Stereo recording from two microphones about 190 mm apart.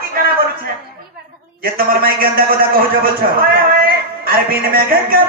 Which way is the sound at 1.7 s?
50° right (ahead or behind).